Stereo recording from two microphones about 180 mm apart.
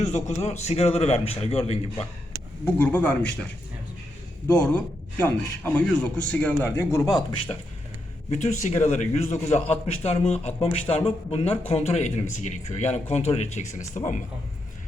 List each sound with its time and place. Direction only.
0.0 s speech: 40° left (ahead or behind)
2.6 s a man's voice: 10° left (ahead or behind)
4.5 s a man's voice: 5° left (ahead or behind)
8.3 s speech: 40° left (ahead or behind)